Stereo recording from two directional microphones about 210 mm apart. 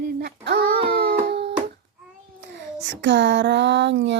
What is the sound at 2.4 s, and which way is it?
Speech, 55° right (ahead or behind).